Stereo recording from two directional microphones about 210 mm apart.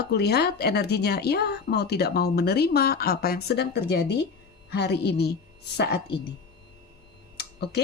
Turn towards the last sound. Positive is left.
turn(degrees=50)  # may be behind; listen again after turning